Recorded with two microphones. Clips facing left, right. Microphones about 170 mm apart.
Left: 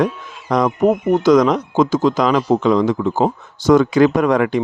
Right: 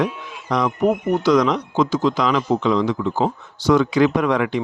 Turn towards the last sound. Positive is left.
turn(degrees=45)  # may be behind; listen again after turning